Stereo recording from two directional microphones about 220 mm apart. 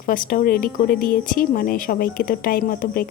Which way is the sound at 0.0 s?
40° left (ahead or behind).